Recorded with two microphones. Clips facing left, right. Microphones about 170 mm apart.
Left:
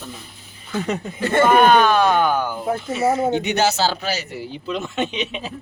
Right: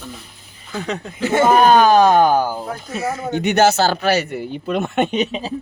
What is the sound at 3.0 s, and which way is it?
Speech, 25° left (ahead or behind).